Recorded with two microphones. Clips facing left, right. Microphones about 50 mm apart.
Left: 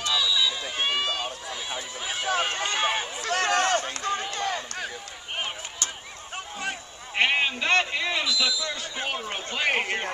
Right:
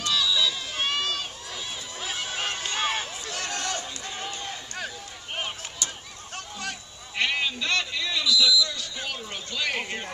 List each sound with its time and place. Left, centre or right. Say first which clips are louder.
0.0 s run: even; centre
3.2 s run: left 9 dB; left
4.3 s run: left 7 dB; left
6.3 s a sound: left 3 dB; left